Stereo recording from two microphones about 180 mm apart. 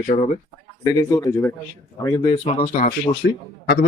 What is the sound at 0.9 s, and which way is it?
Speech, 20° left (ahead or behind).